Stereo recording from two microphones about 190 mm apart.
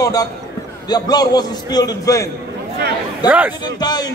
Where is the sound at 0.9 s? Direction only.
20° left (ahead or behind).